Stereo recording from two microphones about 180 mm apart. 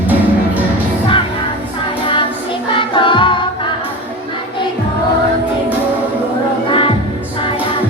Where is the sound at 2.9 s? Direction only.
25° left (ahead or behind).